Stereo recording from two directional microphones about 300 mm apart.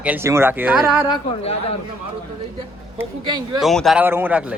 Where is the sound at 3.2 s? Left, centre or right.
Right.